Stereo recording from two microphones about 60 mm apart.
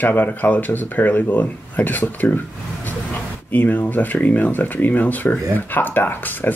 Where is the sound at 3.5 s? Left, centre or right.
Left.